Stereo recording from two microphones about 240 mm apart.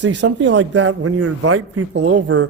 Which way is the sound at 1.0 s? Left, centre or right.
Right.